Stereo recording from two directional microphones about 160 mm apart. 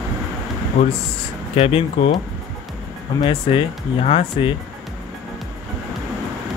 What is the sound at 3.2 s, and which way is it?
Speech, 30° left (ahead or behind).